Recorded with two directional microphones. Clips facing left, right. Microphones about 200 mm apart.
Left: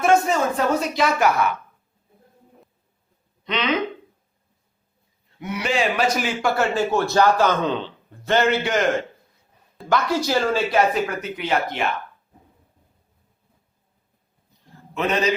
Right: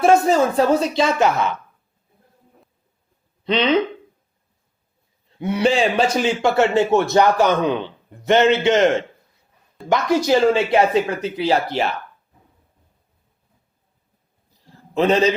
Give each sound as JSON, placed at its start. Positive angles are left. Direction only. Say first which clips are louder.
{"t": 0.0, "sound": "a man's voice", "louder": "right 4 dB", "side_deg": -35}
{"t": 3.4, "sound": "speech", "louder": "right 5 dB", "side_deg": -30}
{"t": 5.4, "sound": "a man's voice", "louder": "right 6 dB", "side_deg": -30}
{"t": 14.9, "sound": "a man's voice", "louder": "right 6 dB", "side_deg": -30}